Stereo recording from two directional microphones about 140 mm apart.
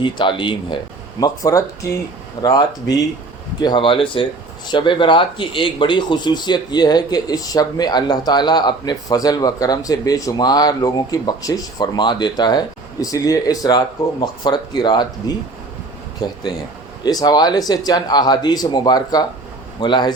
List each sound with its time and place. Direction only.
0.0 s speech: 35° left (ahead or behind)
1.2 s speech: 25° left (ahead or behind)